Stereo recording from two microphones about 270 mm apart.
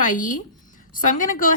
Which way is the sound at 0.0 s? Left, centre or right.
Left.